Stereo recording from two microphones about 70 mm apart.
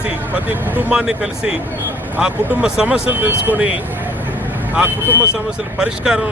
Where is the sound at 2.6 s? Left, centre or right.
Centre.